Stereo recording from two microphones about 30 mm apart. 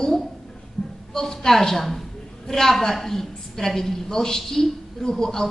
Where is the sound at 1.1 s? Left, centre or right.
Centre.